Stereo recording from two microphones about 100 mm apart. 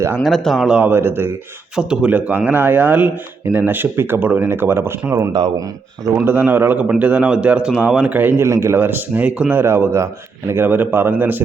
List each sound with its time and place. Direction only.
0.2 s speech: centre (ahead or behind)
0.8 s a man's voice: 20° right (ahead or behind)
1.7 s a man's voice: 10° right (ahead or behind)
6.2 s a man's voice: 20° right (ahead or behind)